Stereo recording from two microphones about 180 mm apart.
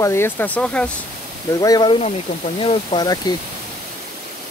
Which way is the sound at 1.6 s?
20° left (ahead or behind).